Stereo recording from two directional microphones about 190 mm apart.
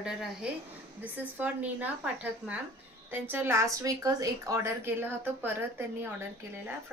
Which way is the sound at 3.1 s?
10° right (ahead or behind).